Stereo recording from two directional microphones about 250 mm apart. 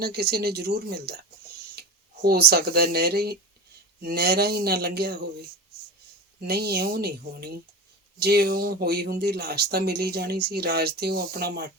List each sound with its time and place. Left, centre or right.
0.0 s speech: right
1.8 s a sound: right
2.2 s speech: right
6.4 s speech: right